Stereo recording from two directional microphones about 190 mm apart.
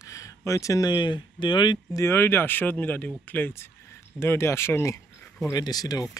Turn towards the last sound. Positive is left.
turn(degrees=20)  # may be behind; listen again after turning